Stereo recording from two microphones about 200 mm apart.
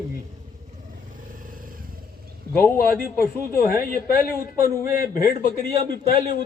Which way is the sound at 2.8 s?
45° left (ahead or behind).